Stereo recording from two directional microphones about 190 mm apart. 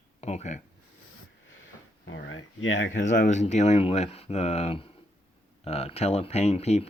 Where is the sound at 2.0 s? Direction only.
85° left.